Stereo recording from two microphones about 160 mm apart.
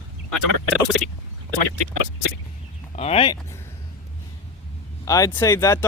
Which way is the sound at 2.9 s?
40° left (ahead or behind).